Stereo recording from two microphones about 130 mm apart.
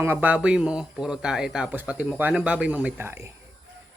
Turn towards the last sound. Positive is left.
turn(degrees=-20)  # may be behind; listen again after turning